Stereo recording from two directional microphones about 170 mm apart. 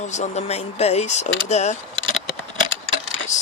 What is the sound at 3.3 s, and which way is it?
Speech, 45° left (ahead or behind).